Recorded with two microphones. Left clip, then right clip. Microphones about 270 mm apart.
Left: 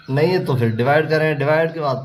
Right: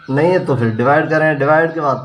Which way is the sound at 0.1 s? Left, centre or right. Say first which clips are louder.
Right 4 dB; left.